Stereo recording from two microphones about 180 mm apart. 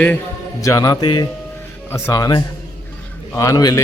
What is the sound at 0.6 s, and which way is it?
Mantra, 20° left (ahead or behind).